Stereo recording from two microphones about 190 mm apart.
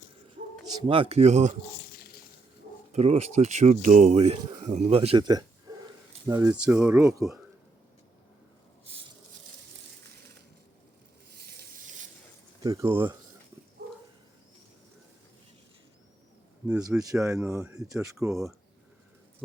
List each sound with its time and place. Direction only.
0.6 s speech: 20° right (ahead or behind)
2.9 s speech: 35° right (ahead or behind)
5.7 s dog: 20° right (ahead or behind)
6.2 s speech: 15° right (ahead or behind)
11.3 s a sound: 55° right (ahead or behind)
12.6 s speech: 15° right (ahead or behind)
17.0 s speech: 20° right (ahead or behind)